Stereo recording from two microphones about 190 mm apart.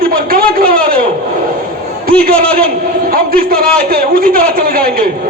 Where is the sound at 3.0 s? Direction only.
50° right (ahead or behind).